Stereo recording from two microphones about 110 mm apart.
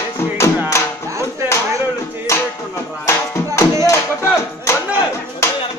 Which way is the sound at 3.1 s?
25° left (ahead or behind).